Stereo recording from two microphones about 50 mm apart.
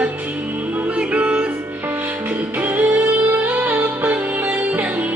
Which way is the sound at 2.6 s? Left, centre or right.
Right.